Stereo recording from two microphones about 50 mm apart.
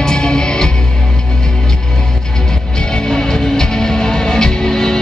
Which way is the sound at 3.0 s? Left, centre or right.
Centre.